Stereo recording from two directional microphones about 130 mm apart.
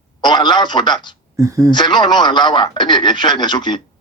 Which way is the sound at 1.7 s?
35° left (ahead or behind).